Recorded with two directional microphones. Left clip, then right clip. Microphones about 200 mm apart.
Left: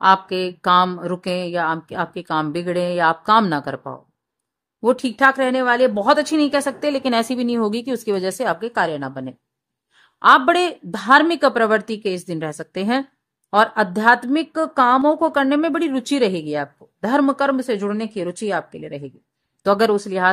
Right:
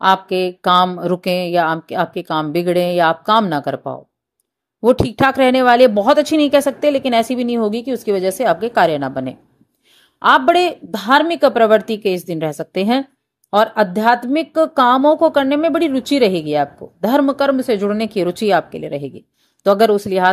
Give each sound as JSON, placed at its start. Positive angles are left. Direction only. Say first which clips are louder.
{"t": 0.0, "sound": "speech", "louder": "right 1 dB", "side_deg": -10}
{"t": 10.2, "sound": "speech", "louder": "right 1 dB", "side_deg": -10}